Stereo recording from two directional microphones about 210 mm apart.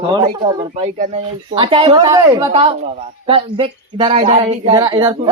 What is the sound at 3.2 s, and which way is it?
Speech, 25° right (ahead or behind).